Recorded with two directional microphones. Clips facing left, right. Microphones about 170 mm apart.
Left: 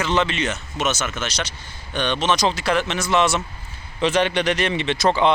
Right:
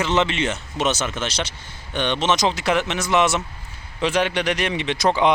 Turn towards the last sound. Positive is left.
turn(degrees=-15)  # may be behind; listen again after turning